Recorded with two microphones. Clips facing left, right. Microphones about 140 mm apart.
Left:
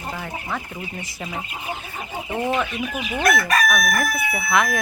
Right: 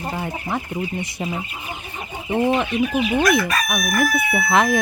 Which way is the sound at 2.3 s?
20° right (ahead or behind).